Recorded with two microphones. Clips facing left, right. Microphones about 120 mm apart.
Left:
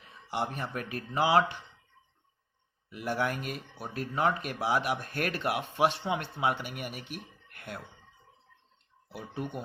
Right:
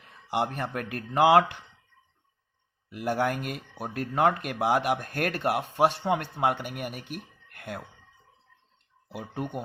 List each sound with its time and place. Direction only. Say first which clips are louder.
0.0 s speech: right 5 dB; 55° right (ahead or behind)
2.9 s speech: right 4 dB; 45° right (ahead or behind)
7.1 s a sound: right 3 dB; 45° right (ahead or behind)
9.1 s speech: right 3 dB; 45° right (ahead or behind)